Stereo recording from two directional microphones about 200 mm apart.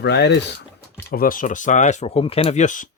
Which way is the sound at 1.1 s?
45° left (ahead or behind).